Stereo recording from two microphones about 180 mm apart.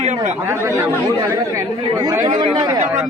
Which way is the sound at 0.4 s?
15° right (ahead or behind).